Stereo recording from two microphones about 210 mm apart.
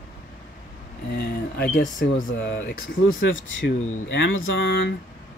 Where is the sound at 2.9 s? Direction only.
65° left (ahead or behind).